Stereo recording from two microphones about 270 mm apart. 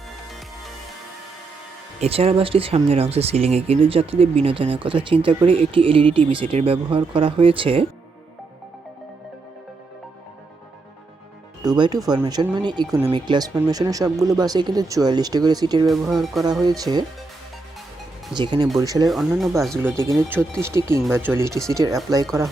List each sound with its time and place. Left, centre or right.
2.0 s speech: right
11.6 s speech: centre
15.9 s speech: centre
16.6 s speech: centre
18.3 s speech: centre
19.0 s speech: centre